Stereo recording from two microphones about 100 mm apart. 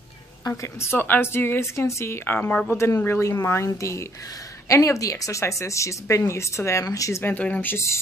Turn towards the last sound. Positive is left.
turn(degrees=30)  # may be behind; listen again after turning